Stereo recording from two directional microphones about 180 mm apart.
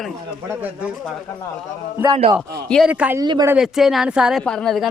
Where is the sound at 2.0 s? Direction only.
30° right (ahead or behind).